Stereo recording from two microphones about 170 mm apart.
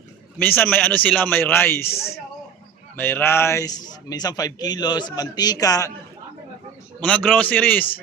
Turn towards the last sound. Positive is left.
turn(degrees=10)  # may be behind; listen again after turning